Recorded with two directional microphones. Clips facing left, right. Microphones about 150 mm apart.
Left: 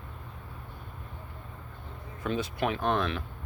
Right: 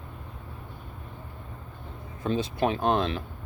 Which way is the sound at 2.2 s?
30° right (ahead or behind).